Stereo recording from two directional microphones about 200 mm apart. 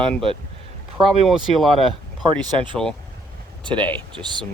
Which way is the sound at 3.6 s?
25° right (ahead or behind).